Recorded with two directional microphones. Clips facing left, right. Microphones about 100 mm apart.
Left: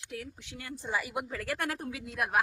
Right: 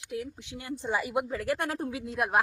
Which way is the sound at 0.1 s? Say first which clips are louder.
Right 6 dB; 20° right (ahead or behind).